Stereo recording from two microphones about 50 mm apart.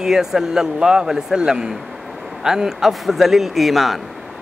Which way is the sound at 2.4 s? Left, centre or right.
Centre.